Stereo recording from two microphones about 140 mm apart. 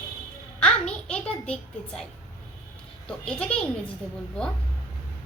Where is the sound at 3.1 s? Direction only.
5° left (ahead or behind).